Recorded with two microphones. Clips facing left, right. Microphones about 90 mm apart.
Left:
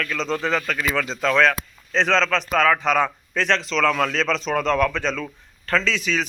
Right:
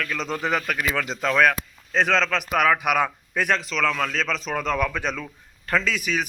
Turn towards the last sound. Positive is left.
turn(degrees=-10)  # may be behind; listen again after turning